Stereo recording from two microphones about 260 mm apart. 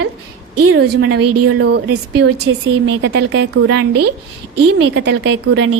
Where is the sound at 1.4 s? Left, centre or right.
Right.